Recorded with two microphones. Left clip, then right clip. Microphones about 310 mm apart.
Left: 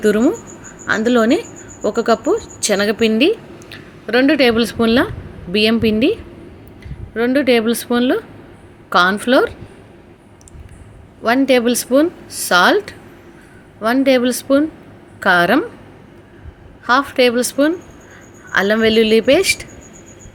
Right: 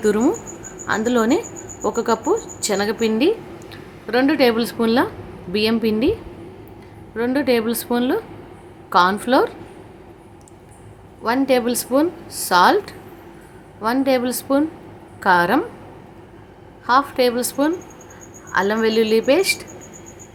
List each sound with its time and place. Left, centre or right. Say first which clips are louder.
0.0 s a woman's voice: left 3 dB; centre
11.2 s a woman's voice: left 4 dB; centre
16.8 s a woman's voice: left 3 dB; centre